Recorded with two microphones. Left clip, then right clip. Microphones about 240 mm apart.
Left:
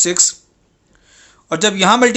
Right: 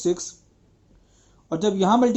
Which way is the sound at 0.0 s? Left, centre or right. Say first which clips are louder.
Left 8 dB; left.